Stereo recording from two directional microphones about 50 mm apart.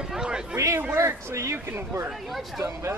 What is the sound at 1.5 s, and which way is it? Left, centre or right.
Speech, right.